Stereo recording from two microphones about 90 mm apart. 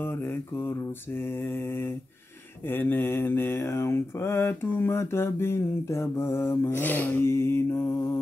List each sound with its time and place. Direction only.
2.7 s mantra: 25° left (ahead or behind)